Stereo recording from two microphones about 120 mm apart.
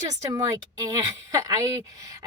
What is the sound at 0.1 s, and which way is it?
Speech, 30° right (ahead or behind).